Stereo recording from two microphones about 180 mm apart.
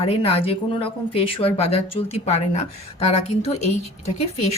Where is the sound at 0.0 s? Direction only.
30° left (ahead or behind).